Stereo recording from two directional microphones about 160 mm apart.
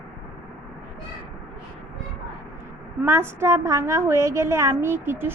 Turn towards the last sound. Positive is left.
turn(degrees=-15)  # may be behind; listen again after turning